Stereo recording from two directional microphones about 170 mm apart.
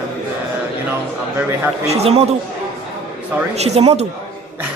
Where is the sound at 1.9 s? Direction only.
35° right (ahead or behind).